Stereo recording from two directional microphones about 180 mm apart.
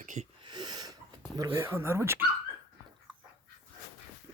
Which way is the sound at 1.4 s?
15° right (ahead or behind).